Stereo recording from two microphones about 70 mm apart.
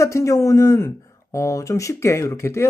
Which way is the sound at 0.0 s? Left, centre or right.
Left.